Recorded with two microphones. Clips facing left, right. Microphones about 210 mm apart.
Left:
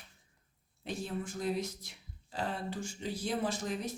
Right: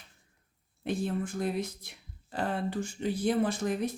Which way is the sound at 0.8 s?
55° right (ahead or behind).